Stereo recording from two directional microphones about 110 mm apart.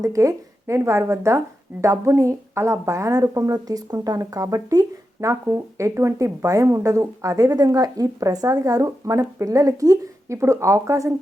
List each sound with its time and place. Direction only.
0.0 s a woman's voice: 30° right (ahead or behind)